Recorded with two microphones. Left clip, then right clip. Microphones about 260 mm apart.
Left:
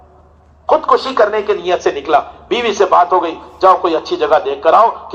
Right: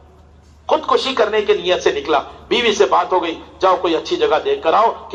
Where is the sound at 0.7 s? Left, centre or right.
Right.